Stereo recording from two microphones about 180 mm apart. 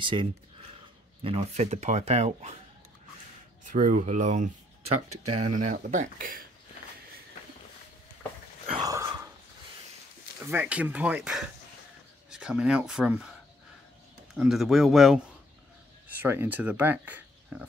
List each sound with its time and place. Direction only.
0.0 s speech: 30° right (ahead or behind)
3.6 s speech: 45° right (ahead or behind)
8.7 s a sound: 20° right (ahead or behind)
10.4 s speech: 10° right (ahead or behind)
14.3 s speech: centre (ahead or behind)
16.2 s speech: 10° right (ahead or behind)